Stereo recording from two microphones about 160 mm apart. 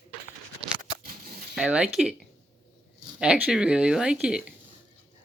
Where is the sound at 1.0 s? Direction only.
65° right (ahead or behind).